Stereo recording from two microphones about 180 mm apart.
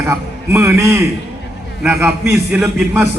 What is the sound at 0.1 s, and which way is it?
A man's voice, 15° right (ahead or behind).